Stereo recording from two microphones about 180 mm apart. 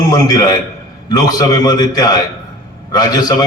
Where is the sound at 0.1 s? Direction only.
20° left (ahead or behind).